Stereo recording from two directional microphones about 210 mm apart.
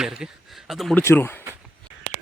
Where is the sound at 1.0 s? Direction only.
10° left (ahead or behind).